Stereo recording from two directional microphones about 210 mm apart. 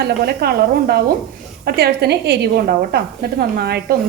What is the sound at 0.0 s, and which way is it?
Speech, 50° right (ahead or behind).